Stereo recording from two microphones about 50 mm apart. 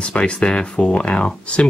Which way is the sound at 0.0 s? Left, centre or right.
Left.